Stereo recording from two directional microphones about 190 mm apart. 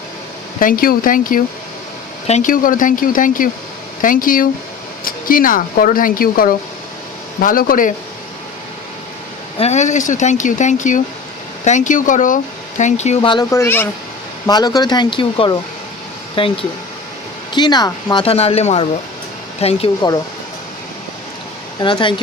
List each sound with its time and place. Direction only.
0.6 s speech: 50° left (ahead or behind)
9.6 s speech: 35° left (ahead or behind)
13.4 s speech: 15° left (ahead or behind); by 20.1 s 30° left (ahead or behind)
21.8 s speech: 25° left (ahead or behind)